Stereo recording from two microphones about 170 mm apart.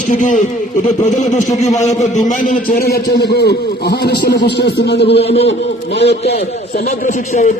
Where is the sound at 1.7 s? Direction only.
45° left (ahead or behind); by 5.2 s 80° left.